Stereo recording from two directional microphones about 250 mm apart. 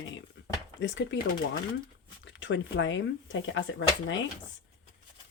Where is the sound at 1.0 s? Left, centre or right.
Left.